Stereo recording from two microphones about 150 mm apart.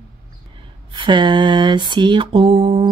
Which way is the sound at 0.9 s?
30° right (ahead or behind).